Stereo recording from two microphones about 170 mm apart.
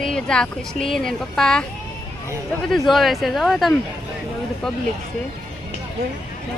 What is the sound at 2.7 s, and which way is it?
Speech, centre (ahead or behind).